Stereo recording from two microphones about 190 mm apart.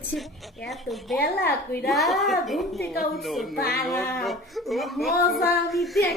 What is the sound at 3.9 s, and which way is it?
A woman's voice, 5° left (ahead or behind).